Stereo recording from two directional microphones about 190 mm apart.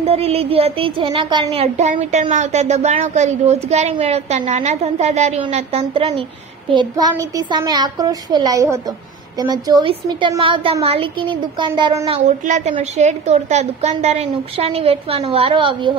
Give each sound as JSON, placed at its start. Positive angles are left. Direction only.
{"t": 0.0, "sound": "a woman's voice", "side_deg": -30}
{"t": 12.3, "sound": "a woman's voice", "side_deg": -40}